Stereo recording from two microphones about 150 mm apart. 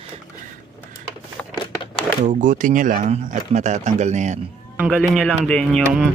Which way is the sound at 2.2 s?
60° right (ahead or behind).